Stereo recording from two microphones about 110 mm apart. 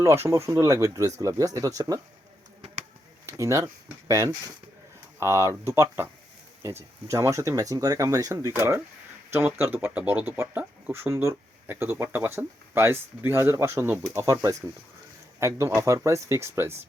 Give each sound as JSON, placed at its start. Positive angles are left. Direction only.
{"t": 0.0, "sound": "speech", "side_deg": -25}
{"t": 3.2, "sound": "speech", "side_deg": -30}